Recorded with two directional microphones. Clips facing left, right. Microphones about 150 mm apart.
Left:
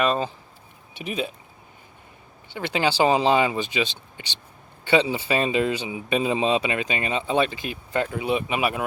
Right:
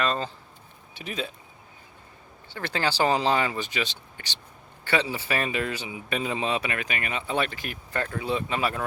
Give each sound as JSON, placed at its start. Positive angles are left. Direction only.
{"t": 0.0, "sound": "speech", "side_deg": 15}
{"t": 2.5, "sound": "speech", "side_deg": 20}